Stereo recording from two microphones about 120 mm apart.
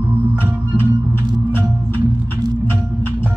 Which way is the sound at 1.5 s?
15° left (ahead or behind).